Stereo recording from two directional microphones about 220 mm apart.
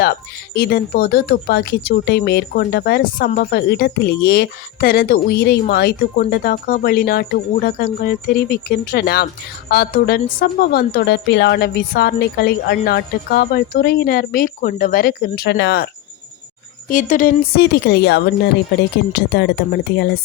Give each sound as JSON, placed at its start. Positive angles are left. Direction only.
{"t": 0.0, "sound": "speech", "side_deg": 45}
{"t": 16.9, "sound": "speech", "side_deg": 35}